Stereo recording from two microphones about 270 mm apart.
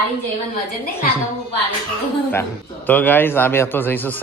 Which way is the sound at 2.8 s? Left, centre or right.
Centre.